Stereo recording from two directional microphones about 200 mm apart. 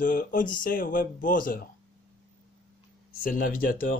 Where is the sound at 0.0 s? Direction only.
40° left (ahead or behind).